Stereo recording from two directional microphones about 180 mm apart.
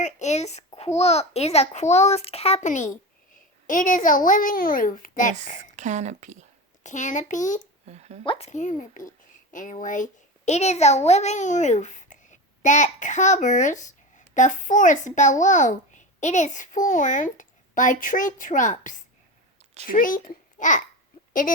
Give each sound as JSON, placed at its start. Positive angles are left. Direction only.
{"t": 0.0, "sound": "a child's voice", "side_deg": 40}
{"t": 5.7, "sound": "a woman's voice", "side_deg": -40}
{"t": 6.8, "sound": "a child's voice", "side_deg": 45}
{"t": 7.9, "sound": "a woman's voice", "side_deg": -35}
{"t": 8.2, "sound": "speech", "side_deg": 30}
{"t": 8.4, "sound": "a child's voice", "side_deg": 40}